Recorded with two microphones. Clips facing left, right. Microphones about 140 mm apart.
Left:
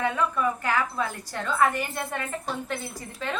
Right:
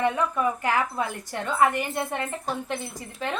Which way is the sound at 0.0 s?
20° right (ahead or behind).